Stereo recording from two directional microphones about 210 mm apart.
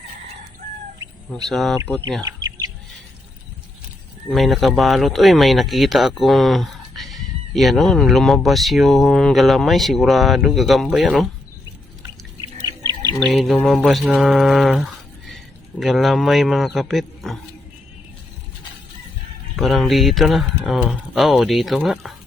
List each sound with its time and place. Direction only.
1.5 s speech: centre (ahead or behind)
2.2 s bird: 15° right (ahead or behind)
4.3 s speech: centre (ahead or behind)
12.4 s bird: 20° right (ahead or behind)
13.3 s speech: centre (ahead or behind)
19.5 s speech: centre (ahead or behind)